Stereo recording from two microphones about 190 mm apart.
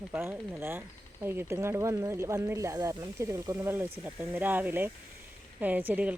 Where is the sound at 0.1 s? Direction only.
15° right (ahead or behind).